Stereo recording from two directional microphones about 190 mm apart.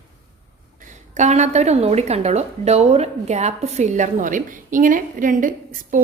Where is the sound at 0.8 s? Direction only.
40° right (ahead or behind).